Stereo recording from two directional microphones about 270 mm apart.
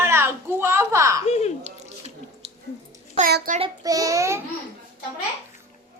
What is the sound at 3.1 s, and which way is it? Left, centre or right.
A woman's voice, right.